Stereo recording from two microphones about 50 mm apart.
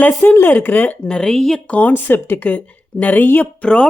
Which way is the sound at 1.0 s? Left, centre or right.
Centre.